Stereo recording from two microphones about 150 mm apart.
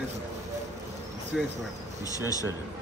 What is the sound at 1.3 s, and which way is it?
Insect, 5° right (ahead or behind).